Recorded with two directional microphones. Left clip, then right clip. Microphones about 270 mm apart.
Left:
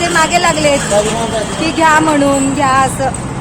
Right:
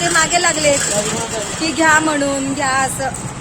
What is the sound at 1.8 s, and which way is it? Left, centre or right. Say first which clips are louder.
Speech: left 4 dB; centre.